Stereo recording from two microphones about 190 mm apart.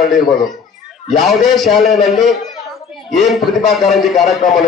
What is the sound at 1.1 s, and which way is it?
Speech, centre (ahead or behind).